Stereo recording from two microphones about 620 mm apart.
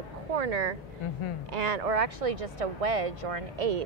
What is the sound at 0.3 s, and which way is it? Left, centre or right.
A woman's voice, right.